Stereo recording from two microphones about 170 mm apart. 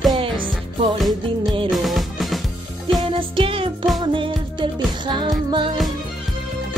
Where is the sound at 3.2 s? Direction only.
30° right (ahead or behind).